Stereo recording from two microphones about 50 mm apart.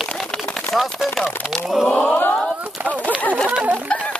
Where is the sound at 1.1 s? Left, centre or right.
Centre.